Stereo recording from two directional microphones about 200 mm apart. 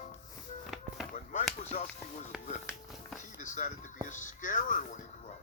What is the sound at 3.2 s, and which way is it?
Music, 40° left (ahead or behind).